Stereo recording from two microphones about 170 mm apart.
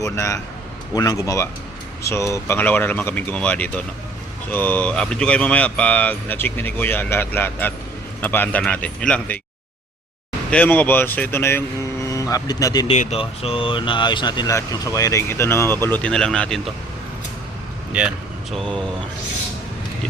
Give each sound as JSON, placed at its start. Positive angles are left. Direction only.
{"t": 0.0, "sound": "speech", "side_deg": 20}
{"t": 10.5, "sound": "speech", "side_deg": 10}
{"t": 12.9, "sound": "speech", "side_deg": 40}
{"t": 17.9, "sound": "speech", "side_deg": -5}